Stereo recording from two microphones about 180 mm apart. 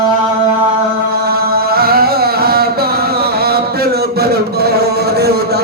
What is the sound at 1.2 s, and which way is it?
Singing, 60° right (ahead or behind).